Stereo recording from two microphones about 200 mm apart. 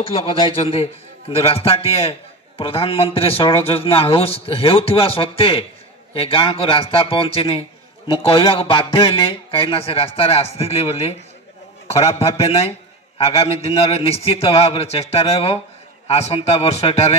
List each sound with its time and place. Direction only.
0.0 s a man's voice: 30° left (ahead or behind)